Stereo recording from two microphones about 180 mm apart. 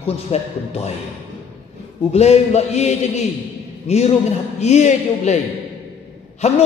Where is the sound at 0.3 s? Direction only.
35° left (ahead or behind).